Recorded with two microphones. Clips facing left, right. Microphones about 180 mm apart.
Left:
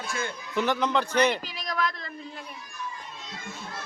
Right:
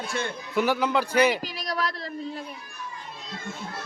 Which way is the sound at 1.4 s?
40° right (ahead or behind).